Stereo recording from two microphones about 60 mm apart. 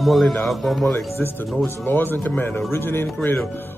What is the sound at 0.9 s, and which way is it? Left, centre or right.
Speech, left.